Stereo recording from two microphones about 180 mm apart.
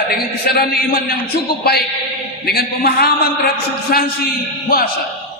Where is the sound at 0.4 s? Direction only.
60° left (ahead or behind).